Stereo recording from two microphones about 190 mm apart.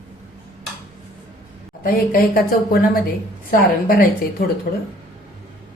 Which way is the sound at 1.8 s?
50° left (ahead or behind).